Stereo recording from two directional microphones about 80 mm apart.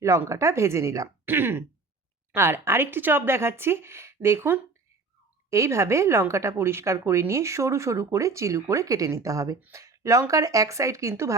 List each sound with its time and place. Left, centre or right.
0.3 s a woman's voice: right
1.2 s a woman's voice: right